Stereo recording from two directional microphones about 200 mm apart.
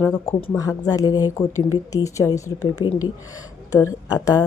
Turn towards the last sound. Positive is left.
turn(degrees=20)  # may be behind; listen again after turning